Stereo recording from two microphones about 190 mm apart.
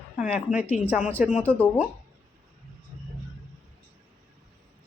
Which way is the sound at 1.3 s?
10° left (ahead or behind).